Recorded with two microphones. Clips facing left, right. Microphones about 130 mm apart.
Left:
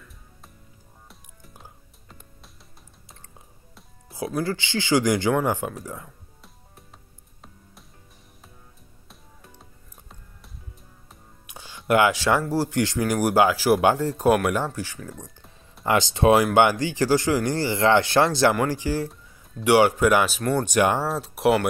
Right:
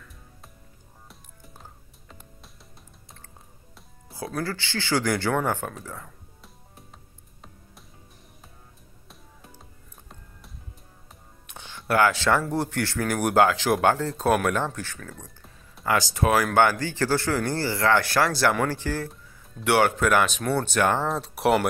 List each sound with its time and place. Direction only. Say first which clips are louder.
1.6 s music: left 1 dB; centre (ahead or behind)
4.4 s speech: left 4 dB; 20° left (ahead or behind)
9.1 s music: right 1 dB; centre (ahead or behind)
11.9 s speech: left 2 dB; 15° left (ahead or behind)
18.5 s speech: left 2 dB; 10° left (ahead or behind)
21.1 s speech: left 1 dB; centre (ahead or behind)